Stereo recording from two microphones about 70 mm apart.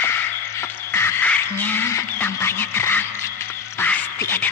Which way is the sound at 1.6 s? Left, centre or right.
Left.